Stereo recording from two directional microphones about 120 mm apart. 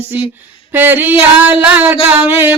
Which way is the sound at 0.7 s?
15° right (ahead or behind).